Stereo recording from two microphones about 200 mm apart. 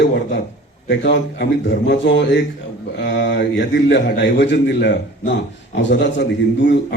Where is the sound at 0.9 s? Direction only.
60° left (ahead or behind).